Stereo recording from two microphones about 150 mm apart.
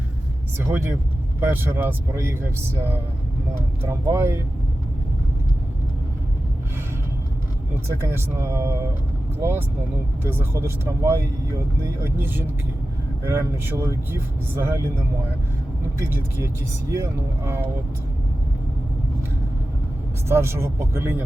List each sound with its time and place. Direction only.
1.4 s speech: 15° right (ahead or behind)
3.8 s speech: 20° right (ahead or behind)
8.0 s speech: 15° right (ahead or behind)
16.0 s speech: 15° right (ahead or behind)
20.2 s speech: 15° right (ahead or behind)